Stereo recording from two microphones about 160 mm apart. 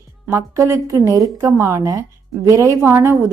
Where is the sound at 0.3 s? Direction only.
20° right (ahead or behind).